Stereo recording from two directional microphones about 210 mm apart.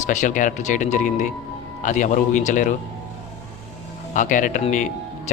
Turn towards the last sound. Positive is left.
turn(degrees=35)  # may be behind; listen again after turning